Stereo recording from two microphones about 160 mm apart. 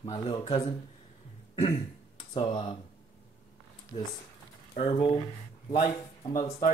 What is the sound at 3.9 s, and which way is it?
Speech, 50° left (ahead or behind).